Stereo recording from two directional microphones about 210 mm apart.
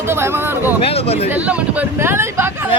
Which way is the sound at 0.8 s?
30° left (ahead or behind).